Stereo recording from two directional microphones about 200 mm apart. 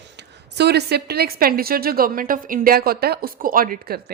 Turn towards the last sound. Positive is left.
turn(degrees=-50)  # may be behind; listen again after turning